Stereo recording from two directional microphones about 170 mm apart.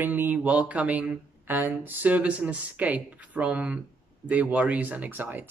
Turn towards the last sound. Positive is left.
turn(degrees=-10)  # may be behind; listen again after turning